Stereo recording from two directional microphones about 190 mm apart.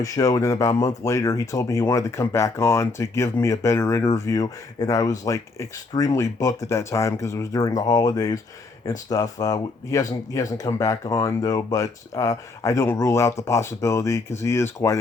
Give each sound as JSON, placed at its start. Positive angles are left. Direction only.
{"t": 0.0, "sound": "speech", "side_deg": 20}